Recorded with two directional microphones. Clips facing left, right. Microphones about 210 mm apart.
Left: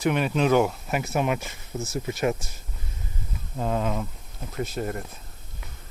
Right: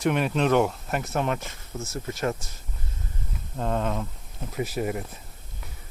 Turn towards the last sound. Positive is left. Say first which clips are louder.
# right 2 dB
turn(degrees=-5)  # may be behind; listen again after turning